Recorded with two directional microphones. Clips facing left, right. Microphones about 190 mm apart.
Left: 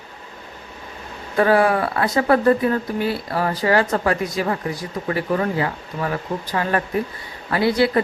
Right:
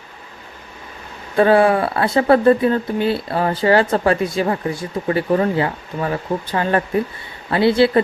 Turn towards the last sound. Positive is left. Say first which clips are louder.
# right 4 dB
turn(degrees=-25)  # may be behind; listen again after turning